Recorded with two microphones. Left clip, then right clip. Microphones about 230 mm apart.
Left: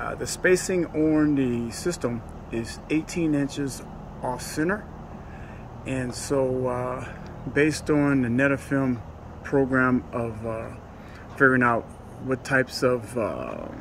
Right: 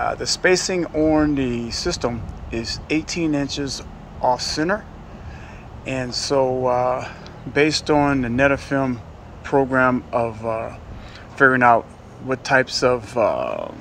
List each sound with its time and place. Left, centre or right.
0.0 s speech: centre
5.9 s speech: centre
6.4 s speech: right
7.0 s speech: centre